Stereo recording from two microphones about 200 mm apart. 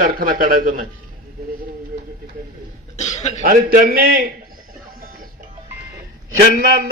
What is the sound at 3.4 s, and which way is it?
Speech, 45° right (ahead or behind).